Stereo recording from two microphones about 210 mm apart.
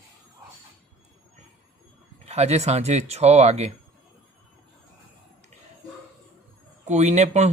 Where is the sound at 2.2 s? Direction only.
30° right (ahead or behind).